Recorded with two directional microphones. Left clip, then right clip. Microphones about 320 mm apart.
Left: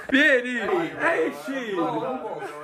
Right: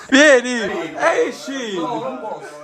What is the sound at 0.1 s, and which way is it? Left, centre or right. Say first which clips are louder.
Speech: right 8 dB; centre.